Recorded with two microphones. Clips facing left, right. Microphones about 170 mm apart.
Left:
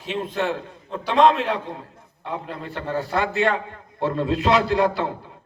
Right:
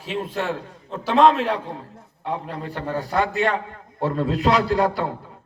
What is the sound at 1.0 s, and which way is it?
A man's voice, 40° right (ahead or behind).